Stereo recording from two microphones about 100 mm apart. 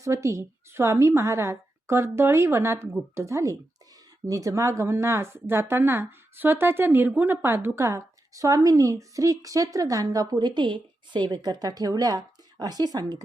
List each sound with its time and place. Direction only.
0.0 s a woman's voice: 30° right (ahead or behind)